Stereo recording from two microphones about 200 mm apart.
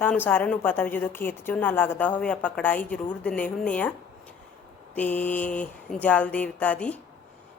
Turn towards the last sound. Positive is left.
turn(degrees=5)  # may be behind; listen again after turning